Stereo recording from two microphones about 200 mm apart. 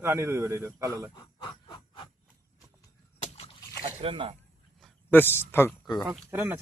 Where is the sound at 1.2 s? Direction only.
25° left (ahead or behind).